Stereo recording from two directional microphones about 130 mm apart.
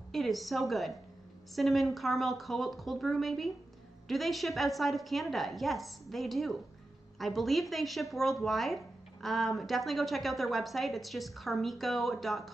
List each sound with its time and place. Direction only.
0.1 s a woman's voice: centre (ahead or behind)